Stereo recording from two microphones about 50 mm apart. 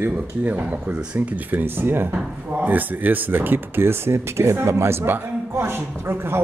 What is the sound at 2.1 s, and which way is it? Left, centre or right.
A woman's voice, right.